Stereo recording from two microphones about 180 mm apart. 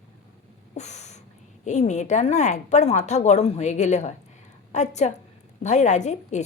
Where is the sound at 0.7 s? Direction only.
40° left (ahead or behind).